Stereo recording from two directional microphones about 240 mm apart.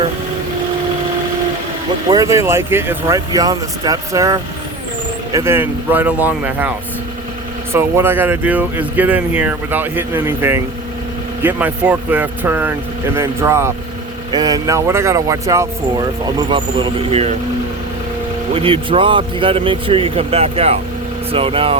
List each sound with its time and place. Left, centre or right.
2.0 s speech: centre
18.5 s speech: right